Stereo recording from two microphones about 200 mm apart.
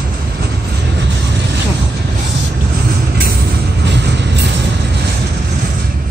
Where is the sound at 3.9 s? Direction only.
60° right (ahead or behind).